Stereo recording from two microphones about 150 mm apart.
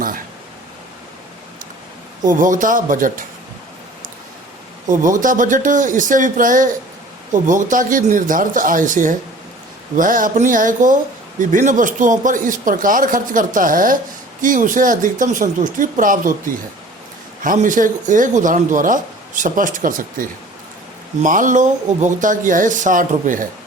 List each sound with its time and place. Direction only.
2.2 s speech: 60° right (ahead or behind)
4.9 s speech: 60° right (ahead or behind)
17.4 s speech: 60° right (ahead or behind)